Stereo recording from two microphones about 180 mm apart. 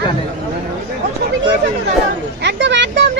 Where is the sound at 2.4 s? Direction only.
80° right.